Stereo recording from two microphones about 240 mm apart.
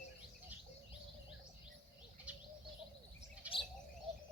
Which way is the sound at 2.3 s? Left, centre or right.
Centre.